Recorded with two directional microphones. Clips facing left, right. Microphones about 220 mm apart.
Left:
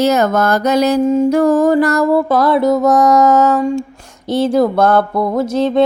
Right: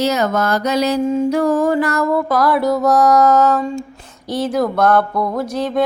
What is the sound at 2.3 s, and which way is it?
Music, 25° left (ahead or behind).